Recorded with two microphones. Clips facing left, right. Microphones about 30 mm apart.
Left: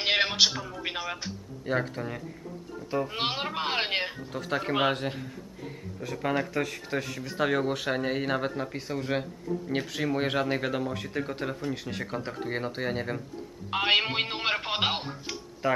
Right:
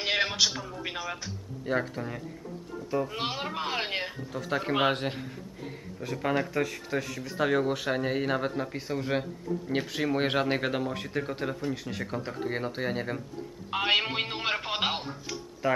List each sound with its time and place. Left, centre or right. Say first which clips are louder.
0.0 s music: left 2 dB; centre
0.5 s speech: left 1 dB; centre
0.8 s speech: left 2 dB; centre
1.7 s speech: even; centre
3.2 s speech: left 2 dB; left
4.3 s speech: right 2 dB; centre
4.9 s a man's voice: even; centre
5.9 s speech: even; centre
15.6 s speech: even; centre